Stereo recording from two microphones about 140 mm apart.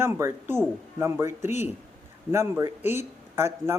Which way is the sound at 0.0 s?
20° right (ahead or behind).